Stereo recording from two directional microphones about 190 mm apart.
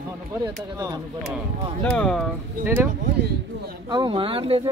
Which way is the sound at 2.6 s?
10° right (ahead or behind).